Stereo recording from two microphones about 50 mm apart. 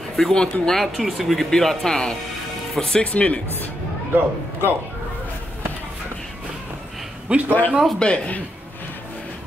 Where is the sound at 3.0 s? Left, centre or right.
Left.